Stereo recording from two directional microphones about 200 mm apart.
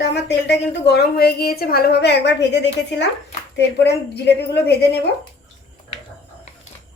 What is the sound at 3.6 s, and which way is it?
A woman's voice, 60° left (ahead or behind).